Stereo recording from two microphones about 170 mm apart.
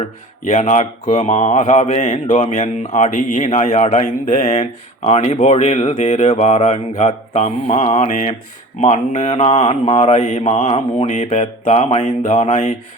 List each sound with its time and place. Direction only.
0.4 s speech: 45° left (ahead or behind)